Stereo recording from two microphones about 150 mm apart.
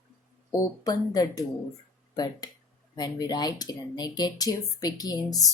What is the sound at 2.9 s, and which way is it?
A woman's voice, 25° left (ahead or behind).